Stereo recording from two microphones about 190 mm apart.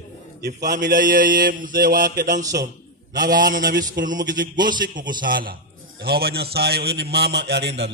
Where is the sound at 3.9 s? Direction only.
45° right (ahead or behind).